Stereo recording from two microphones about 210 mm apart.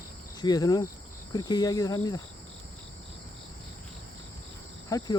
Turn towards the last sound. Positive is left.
turn(degrees=15)  # may be behind; listen again after turning